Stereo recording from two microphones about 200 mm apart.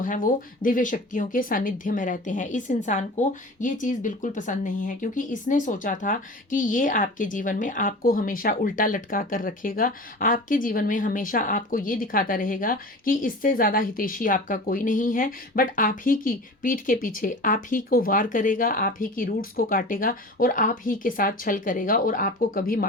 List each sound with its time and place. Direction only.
0.0 s a woman's voice: 40° left (ahead or behind)